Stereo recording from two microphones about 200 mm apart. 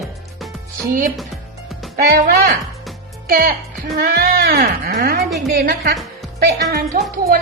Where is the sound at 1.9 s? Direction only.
50° right (ahead or behind).